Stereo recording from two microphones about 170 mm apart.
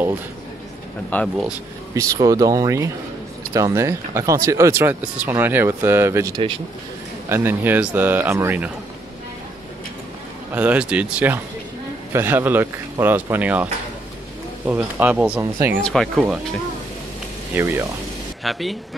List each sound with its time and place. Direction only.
1.1 s speech: 10° left (ahead or behind)
2.0 s speech: 20° right (ahead or behind)
10.5 s speech: 10° right (ahead or behind)
14.7 s speech: 10° right (ahead or behind)
15.8 s speech: centre (ahead or behind)
18.4 s speech: centre (ahead or behind)